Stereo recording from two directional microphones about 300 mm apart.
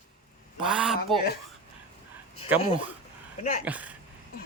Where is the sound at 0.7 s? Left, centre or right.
Centre.